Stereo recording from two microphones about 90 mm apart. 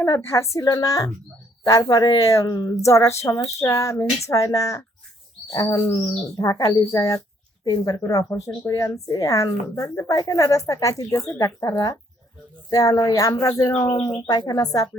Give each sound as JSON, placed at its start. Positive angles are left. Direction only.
{"t": 0.0, "sound": "speech", "side_deg": 30}
{"t": 11.6, "sound": "speech", "side_deg": 45}
{"t": 14.0, "sound": "speech", "side_deg": 50}